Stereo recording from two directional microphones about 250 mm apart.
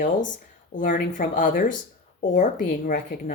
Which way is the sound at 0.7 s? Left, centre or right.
Left.